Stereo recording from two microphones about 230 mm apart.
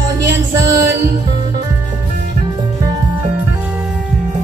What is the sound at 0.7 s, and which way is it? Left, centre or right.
Music, centre.